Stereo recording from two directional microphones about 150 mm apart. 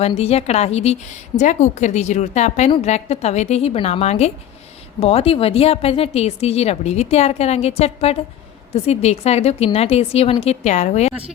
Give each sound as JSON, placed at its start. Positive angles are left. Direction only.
{"t": 0.0, "sound": "a woman's voice", "side_deg": 45}